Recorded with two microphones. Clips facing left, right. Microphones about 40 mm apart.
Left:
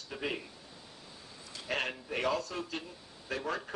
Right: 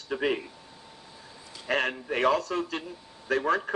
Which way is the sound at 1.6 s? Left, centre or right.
Right.